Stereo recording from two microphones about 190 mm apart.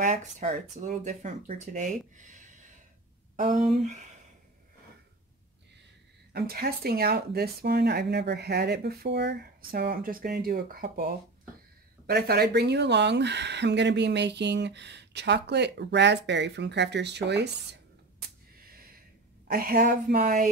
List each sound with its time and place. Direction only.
0.0 s speech: 40° right (ahead or behind)
6.3 s speech: 55° right (ahead or behind)
12.1 s speech: 55° right (ahead or behind)
19.4 s a woman's voice: 50° right (ahead or behind)